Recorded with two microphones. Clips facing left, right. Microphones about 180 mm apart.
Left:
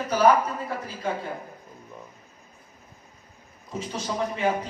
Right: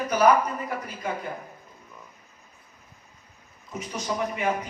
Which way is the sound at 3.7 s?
30° left (ahead or behind).